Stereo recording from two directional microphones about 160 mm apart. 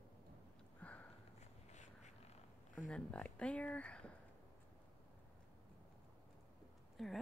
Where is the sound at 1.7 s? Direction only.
45° left (ahead or behind).